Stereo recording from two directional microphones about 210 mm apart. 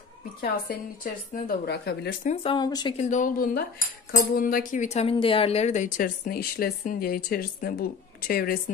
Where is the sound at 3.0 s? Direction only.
35° left (ahead or behind).